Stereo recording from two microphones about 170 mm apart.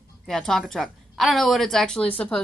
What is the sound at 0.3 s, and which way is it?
A woman's voice, centre (ahead or behind).